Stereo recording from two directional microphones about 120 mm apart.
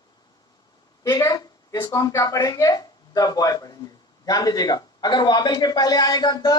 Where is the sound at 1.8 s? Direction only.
30° left (ahead or behind).